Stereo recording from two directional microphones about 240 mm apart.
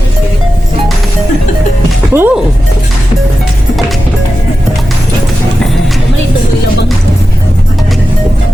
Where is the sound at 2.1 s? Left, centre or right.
Centre.